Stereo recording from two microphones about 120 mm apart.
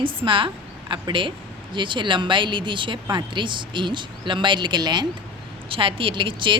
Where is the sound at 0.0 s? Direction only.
45° right (ahead or behind).